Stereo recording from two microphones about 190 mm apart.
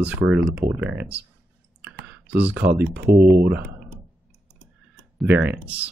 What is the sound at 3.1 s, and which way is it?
Speech, 55° right (ahead or behind).